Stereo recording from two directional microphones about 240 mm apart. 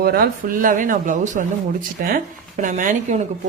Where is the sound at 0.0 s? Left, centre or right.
Right.